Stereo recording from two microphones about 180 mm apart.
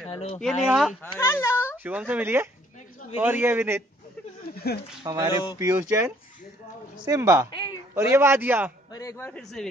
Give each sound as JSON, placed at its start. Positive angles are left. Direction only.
{"t": 0.1, "sound": "speech", "side_deg": 30}
{"t": 0.7, "sound": "speech", "side_deg": 0}
{"t": 1.2, "sound": "speech", "side_deg": 15}
{"t": 1.8, "sound": "a man's voice", "side_deg": -10}
{"t": 4.6, "sound": "speech", "side_deg": 60}
{"t": 5.0, "sound": "a man's voice", "side_deg": -15}
{"t": 5.3, "sound": "speech", "side_deg": 25}
{"t": 5.6, "sound": "a man's voice", "side_deg": -15}
{"t": 8.9, "sound": "a man's voice", "side_deg": 15}